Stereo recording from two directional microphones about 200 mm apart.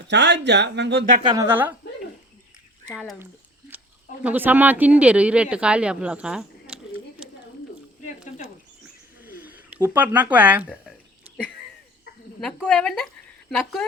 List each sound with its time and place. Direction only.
0.1 s speech: 60° right (ahead or behind)
1.2 s speech: 20° right (ahead or behind)
1.5 s a woman's voice: 10° right (ahead or behind)
2.9 s a woman's voice: 5° right (ahead or behind)
8.0 s a sound: 40° left (ahead or behind)
9.4 s speech: 5° right (ahead or behind)
12.4 s a woman's voice: 5° left (ahead or behind)